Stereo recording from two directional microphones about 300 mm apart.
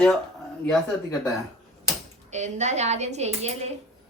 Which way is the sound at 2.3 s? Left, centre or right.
Right.